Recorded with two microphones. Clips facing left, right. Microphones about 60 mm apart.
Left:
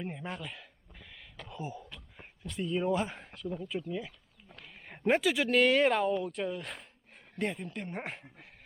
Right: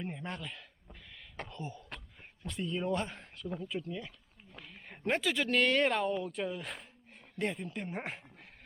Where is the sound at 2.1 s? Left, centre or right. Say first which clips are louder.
Left 3 dB; centre.